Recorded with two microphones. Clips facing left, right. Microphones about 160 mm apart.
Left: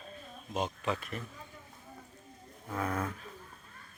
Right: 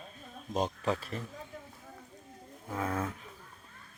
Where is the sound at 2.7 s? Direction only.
20° right (ahead or behind).